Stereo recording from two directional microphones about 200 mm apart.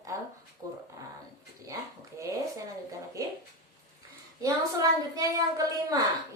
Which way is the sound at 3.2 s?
15° right (ahead or behind).